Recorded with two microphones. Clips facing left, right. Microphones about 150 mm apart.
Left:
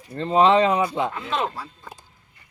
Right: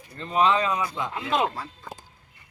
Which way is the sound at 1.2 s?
15° right (ahead or behind).